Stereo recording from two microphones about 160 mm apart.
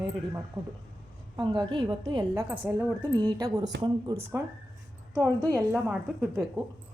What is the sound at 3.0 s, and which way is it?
A woman's voice, 25° right (ahead or behind).